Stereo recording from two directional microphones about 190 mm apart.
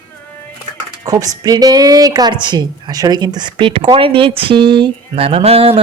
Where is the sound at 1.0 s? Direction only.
20° right (ahead or behind).